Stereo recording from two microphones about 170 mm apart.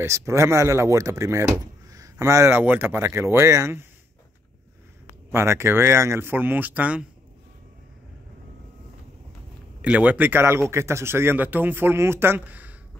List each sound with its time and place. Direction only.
0.0 s speech: 15° right (ahead or behind)
5.3 s speech: 15° right (ahead or behind)
9.8 s speech: 5° right (ahead or behind)